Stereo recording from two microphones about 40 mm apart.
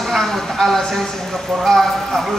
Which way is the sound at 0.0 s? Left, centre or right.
Centre.